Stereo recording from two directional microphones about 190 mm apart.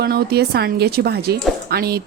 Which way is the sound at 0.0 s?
55° right (ahead or behind).